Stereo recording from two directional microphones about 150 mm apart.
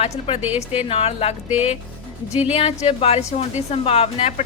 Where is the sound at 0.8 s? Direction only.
40° left (ahead or behind).